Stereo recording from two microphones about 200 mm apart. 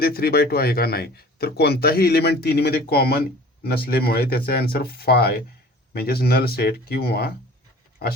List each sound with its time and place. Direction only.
0.0 s speech: 50° left (ahead or behind)